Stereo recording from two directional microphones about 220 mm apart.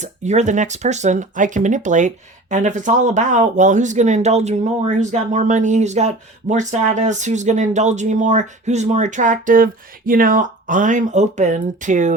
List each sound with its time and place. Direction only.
0.0 s speech: 30° right (ahead or behind)